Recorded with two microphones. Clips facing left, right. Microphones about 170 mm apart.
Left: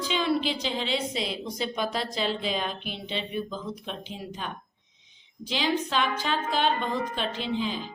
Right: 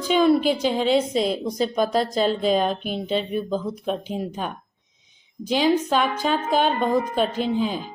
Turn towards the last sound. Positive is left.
turn(degrees=-50)  # may be behind; listen again after turning